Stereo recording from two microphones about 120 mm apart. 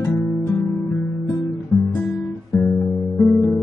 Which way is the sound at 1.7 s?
25° left (ahead or behind).